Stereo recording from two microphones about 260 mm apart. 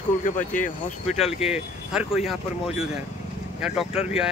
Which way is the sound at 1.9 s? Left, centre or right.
Centre.